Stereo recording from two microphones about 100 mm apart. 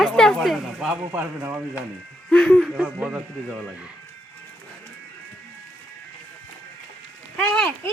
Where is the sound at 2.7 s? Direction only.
15° right (ahead or behind).